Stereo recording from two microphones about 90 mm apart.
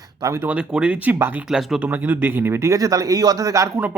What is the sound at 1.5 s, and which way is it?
Speech, 5° right (ahead or behind).